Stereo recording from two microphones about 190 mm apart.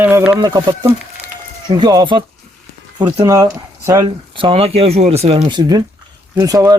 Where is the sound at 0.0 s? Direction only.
10° right (ahead or behind).